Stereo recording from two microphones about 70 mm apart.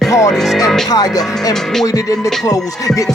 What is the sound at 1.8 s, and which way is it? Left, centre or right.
Speech, left.